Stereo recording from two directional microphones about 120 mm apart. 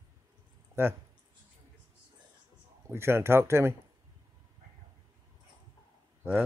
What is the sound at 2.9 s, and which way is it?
Speech, 20° right (ahead or behind).